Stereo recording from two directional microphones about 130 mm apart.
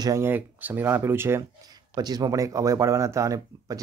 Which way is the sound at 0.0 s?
20° right (ahead or behind).